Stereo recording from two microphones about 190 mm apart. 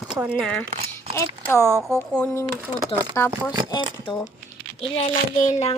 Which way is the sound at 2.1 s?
5° left (ahead or behind).